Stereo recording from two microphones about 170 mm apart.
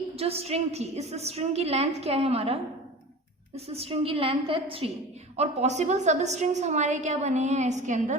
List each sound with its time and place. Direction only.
0.2 s a woman's voice: 35° right (ahead or behind)